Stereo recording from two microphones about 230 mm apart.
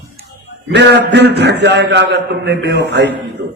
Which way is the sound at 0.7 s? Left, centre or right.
Right.